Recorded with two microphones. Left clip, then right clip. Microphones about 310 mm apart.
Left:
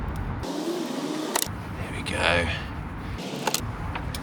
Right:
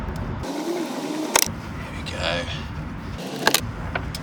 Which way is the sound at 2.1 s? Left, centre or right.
Left.